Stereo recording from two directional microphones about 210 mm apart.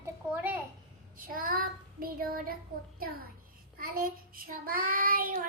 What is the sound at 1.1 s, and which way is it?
Child singing, 40° right (ahead or behind).